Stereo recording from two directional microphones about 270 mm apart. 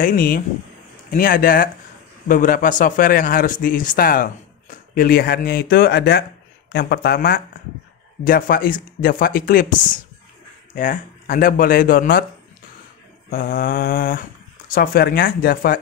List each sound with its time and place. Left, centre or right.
0.0 s speech: left
13.3 s speech: left